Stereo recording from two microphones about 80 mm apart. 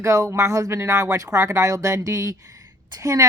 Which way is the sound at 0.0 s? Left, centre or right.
Right.